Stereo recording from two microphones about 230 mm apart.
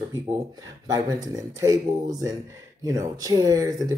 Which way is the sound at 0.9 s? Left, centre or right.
Centre.